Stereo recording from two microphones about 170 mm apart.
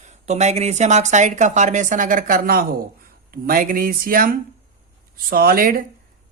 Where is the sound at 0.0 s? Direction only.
45° right (ahead or behind).